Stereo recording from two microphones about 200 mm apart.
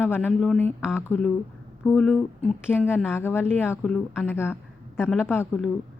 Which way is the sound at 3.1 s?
10° left (ahead or behind).